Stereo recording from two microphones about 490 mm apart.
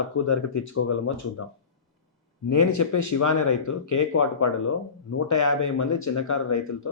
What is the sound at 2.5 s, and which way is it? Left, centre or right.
Speech, left.